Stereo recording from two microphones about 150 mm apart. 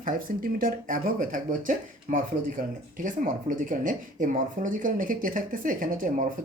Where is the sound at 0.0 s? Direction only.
65° right (ahead or behind).